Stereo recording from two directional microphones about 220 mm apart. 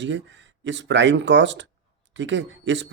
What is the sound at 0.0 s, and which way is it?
Speech, 55° right (ahead or behind).